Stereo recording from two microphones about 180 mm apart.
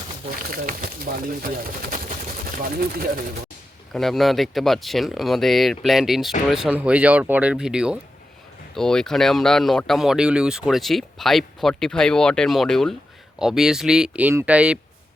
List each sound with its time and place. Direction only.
0.5 s speech: 50° right (ahead or behind)
3.9 s speech: centre (ahead or behind)